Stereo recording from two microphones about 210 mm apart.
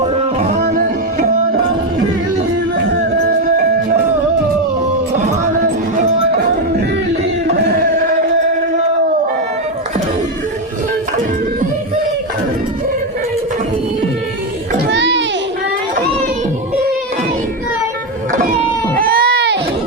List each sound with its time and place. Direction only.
0.0 s music: 30° right (ahead or behind)
3.2 s music: 45° right (ahead or behind)
6.3 s music: 45° right (ahead or behind)
7.4 s chant: 50° right (ahead or behind)
14.9 s children playing: 60° right (ahead or behind)
18.9 s baby cry: 45° right (ahead or behind)